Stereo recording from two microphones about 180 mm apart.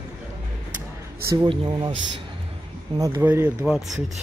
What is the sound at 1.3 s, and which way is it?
Speech, 25° right (ahead or behind).